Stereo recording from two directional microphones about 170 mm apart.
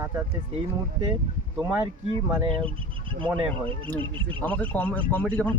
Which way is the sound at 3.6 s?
30° right (ahead or behind).